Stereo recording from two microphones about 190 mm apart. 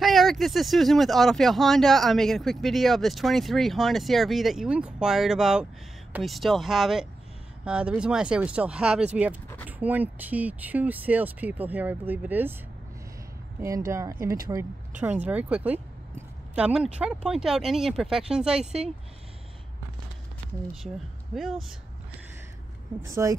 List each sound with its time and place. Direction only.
0.0 s speech: centre (ahead or behind)
13.6 s speech: 15° right (ahead or behind)
21.4 s speech: centre (ahead or behind)
22.9 s speech: 15° right (ahead or behind)